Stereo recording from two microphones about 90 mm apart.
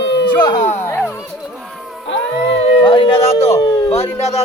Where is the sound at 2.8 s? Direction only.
70° left (ahead or behind).